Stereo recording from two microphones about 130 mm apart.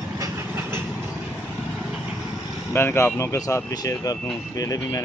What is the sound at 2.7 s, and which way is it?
Speech, 20° left (ahead or behind).